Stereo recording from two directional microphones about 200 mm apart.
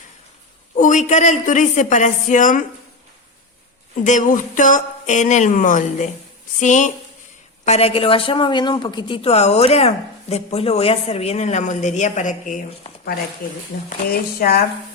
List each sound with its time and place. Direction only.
0.8 s speech: 40° left (ahead or behind)
4.0 s speech: 40° left (ahead or behind)